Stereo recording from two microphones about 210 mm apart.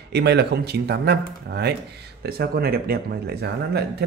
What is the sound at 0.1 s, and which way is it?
Speech, 50° right (ahead or behind).